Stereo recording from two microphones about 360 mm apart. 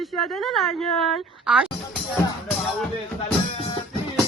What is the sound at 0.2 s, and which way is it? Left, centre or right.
Music, centre.